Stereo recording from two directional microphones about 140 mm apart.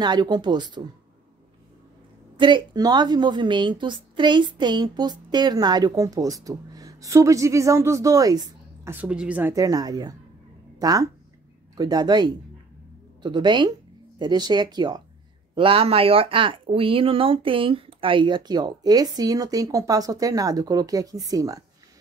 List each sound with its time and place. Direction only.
0.0 s speech: 30° right (ahead or behind)
2.3 s a woman's voice: 35° right (ahead or behind)
9.0 s a woman's voice: 10° right (ahead or behind)
9.5 s a woman's voice: 25° right (ahead or behind)